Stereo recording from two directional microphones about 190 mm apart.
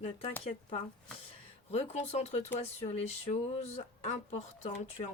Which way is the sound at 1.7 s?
35° left (ahead or behind).